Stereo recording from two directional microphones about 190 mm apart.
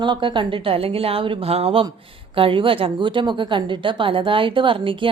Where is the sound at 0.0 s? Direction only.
25° right (ahead or behind).